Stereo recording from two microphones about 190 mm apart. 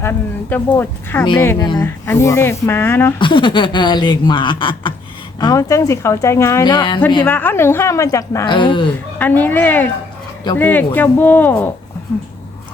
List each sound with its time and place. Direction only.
0.0 s speech: 10° left (ahead or behind)
1.2 s speech: 25° left (ahead or behind)
3.2 s speech: 25° left (ahead or behind)
7.3 s speech: 10° left (ahead or behind)
8.5 s speech: 25° left (ahead or behind)
9.1 s speech: 10° left (ahead or behind)